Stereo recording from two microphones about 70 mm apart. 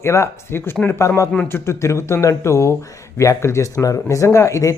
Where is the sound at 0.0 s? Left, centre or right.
Left.